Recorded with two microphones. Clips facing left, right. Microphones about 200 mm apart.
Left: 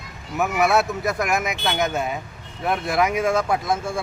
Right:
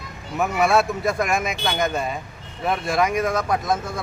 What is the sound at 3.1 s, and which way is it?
Speech, 25° left (ahead or behind).